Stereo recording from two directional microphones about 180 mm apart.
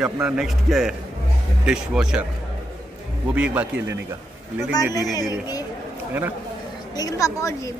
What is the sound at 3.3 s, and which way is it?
Speech, 5° right (ahead or behind).